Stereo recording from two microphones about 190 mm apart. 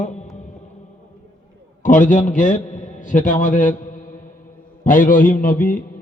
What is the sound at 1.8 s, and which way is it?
A man's voice, 40° left (ahead or behind).